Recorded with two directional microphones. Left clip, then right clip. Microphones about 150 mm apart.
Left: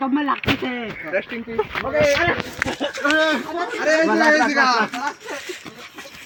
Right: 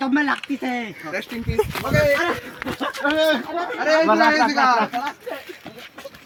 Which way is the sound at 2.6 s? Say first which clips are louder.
Left 1 dB; 10° right (ahead or behind).